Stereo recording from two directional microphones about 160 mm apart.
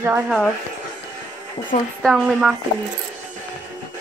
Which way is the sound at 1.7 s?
55° left (ahead or behind).